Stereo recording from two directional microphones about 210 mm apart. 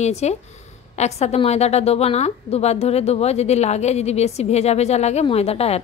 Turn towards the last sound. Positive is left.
turn(degrees=30)  # may be behind; listen again after turning